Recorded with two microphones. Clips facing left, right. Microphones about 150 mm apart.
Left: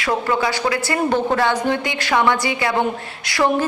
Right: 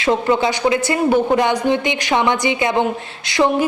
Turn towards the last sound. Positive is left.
turn(degrees=-25)  # may be behind; listen again after turning